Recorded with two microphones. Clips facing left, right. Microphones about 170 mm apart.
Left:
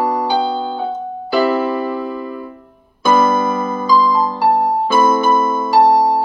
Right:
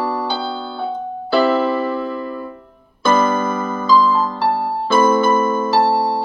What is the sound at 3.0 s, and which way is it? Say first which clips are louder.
Electric piano: left 2 dB; 10° left (ahead or behind).